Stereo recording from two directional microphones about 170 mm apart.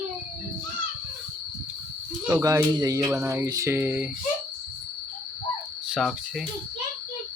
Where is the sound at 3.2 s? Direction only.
20° right (ahead or behind).